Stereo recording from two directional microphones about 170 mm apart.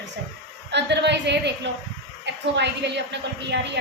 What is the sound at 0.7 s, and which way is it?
A woman's voice, 90° right.